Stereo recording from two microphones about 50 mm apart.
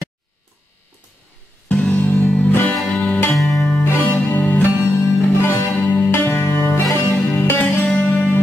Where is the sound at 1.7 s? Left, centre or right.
Left.